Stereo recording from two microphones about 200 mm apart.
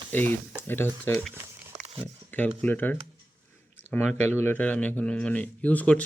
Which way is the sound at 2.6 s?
10° left (ahead or behind).